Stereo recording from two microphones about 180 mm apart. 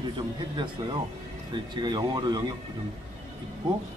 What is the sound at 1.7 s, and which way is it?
Speech, 25° right (ahead or behind).